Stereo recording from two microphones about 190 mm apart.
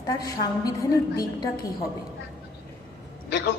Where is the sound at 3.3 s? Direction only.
65° left (ahead or behind).